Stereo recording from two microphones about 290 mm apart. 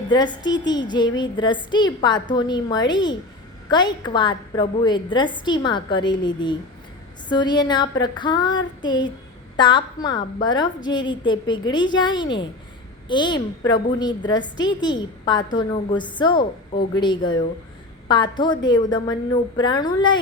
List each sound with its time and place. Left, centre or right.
0.1 s a woman's voice: centre